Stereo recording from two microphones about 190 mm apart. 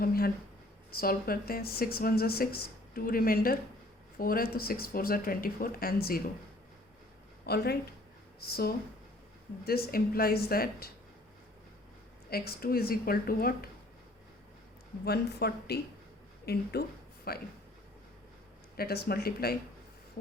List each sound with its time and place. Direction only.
0.0 s a sound: 50° left (ahead or behind)
0.9 s speech: 50° left (ahead or behind)
7.4 s speech: 55° left (ahead or behind)
12.3 s speech: 50° left (ahead or behind)
15.0 s speech: 55° left (ahead or behind)
18.8 s speech: 55° left (ahead or behind)